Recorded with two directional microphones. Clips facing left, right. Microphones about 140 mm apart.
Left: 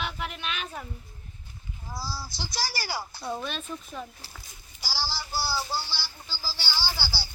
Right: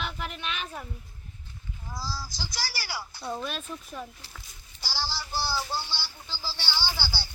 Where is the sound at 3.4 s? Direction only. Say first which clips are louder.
Even; 5° right (ahead or behind).